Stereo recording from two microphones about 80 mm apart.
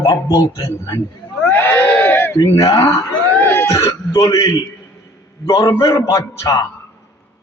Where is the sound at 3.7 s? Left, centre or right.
Left.